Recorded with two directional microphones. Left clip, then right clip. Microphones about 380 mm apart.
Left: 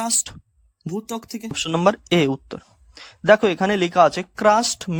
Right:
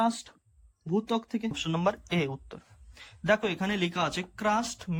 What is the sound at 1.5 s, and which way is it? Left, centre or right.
Speech, centre.